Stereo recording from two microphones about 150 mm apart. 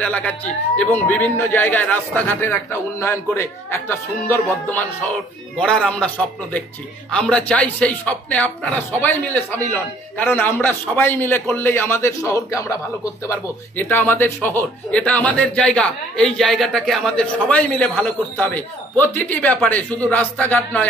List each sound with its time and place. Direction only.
0.0 s speech: 10° left (ahead or behind)
7.1 s speech: 5° left (ahead or behind)